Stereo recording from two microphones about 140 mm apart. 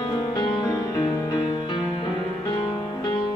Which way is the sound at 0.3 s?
30° left (ahead or behind).